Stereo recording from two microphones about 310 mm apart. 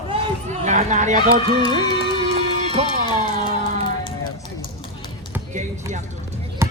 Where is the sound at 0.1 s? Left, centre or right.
Centre.